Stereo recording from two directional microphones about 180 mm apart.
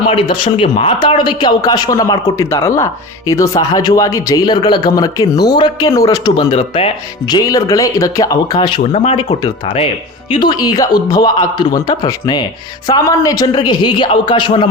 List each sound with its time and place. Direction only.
0.1 s speech: 30° left (ahead or behind)
6.3 s speech: 35° left (ahead or behind)